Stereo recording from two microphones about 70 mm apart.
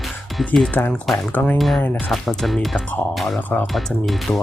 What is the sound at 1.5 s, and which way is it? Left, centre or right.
Speech, centre.